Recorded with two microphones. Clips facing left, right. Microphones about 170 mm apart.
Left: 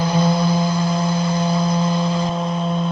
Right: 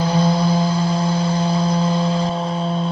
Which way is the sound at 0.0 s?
30° right (ahead or behind).